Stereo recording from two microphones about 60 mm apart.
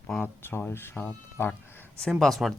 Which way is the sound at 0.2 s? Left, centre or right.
Left.